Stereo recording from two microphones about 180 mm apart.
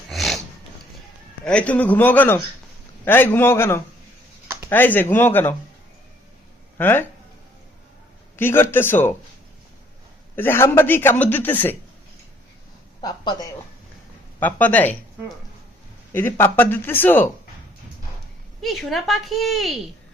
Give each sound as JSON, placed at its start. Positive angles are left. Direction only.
{"t": 0.1, "sound": "a sound", "side_deg": 0}
{"t": 1.5, "sound": "a man's voice", "side_deg": 5}
{"t": 6.7, "sound": "a man's voice", "side_deg": 10}
{"t": 8.4, "sound": "a man's voice", "side_deg": 10}
{"t": 10.3, "sound": "a man's voice", "side_deg": 10}
{"t": 13.0, "sound": "speech", "side_deg": 25}
{"t": 14.3, "sound": "a man's voice", "side_deg": 10}
{"t": 16.1, "sound": "a man's voice", "side_deg": 10}
{"t": 18.6, "sound": "a woman's voice", "side_deg": 0}